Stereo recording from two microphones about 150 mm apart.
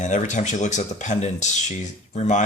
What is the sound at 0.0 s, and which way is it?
Speech, 55° left (ahead or behind).